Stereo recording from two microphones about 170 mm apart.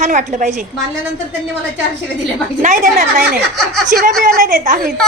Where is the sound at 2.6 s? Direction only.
50° right (ahead or behind).